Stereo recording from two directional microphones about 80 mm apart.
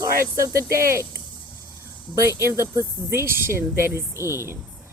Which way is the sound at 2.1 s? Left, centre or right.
Right.